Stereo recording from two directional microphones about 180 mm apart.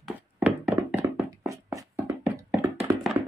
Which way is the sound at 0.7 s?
10° right (ahead or behind).